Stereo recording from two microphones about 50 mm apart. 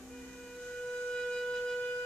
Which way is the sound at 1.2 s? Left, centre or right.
Centre.